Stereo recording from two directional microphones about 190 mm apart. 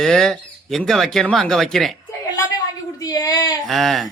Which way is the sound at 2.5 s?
20° left (ahead or behind).